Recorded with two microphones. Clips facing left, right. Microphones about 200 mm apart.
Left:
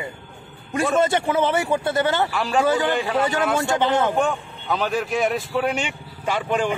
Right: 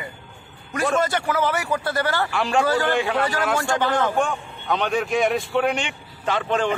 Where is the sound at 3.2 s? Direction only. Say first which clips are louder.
Left 2 dB; 20° left (ahead or behind).